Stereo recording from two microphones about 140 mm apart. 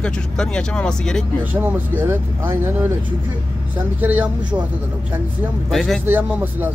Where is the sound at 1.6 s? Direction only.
15° right (ahead or behind).